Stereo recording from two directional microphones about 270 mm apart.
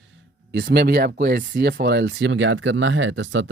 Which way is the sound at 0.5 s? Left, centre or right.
Right.